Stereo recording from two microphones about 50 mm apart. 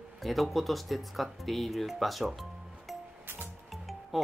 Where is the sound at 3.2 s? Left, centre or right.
Right.